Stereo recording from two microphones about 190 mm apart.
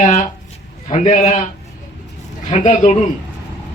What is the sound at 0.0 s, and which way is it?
Speech, 35° left (ahead or behind).